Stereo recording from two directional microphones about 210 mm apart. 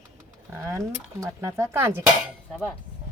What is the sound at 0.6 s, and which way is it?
Speech, 15° right (ahead or behind).